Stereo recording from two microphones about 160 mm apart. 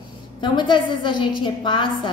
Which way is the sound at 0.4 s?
30° left (ahead or behind).